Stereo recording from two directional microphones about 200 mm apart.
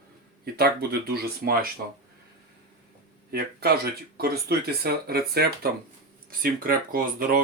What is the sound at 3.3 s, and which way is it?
Speech, 50° right (ahead or behind).